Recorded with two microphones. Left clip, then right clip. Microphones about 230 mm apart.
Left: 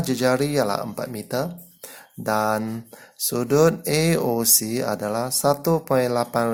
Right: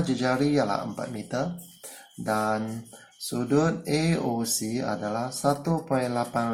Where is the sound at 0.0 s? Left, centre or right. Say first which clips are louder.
Left 4 dB; left.